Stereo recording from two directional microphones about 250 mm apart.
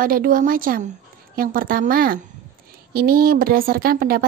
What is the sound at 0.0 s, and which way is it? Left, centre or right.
Speech, right.